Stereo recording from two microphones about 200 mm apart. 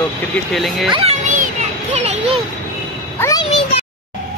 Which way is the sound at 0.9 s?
30° right (ahead or behind).